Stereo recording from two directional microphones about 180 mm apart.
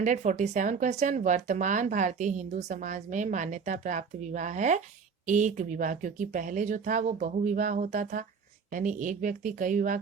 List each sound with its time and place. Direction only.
0.0 s speech: 45° right (ahead or behind)